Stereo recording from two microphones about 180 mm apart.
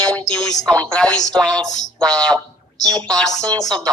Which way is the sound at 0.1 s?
5° left (ahead or behind).